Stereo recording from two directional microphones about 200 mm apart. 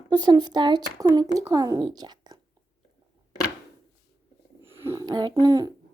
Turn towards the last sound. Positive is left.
turn(degrees=-20)  # may be behind; listen again after turning